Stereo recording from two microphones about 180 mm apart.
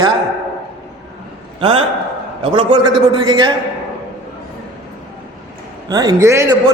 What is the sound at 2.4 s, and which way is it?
A man's voice, 30° right (ahead or behind).